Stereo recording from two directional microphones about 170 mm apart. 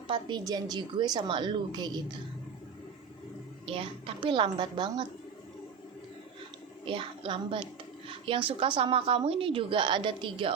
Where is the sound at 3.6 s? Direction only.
35° right (ahead or behind).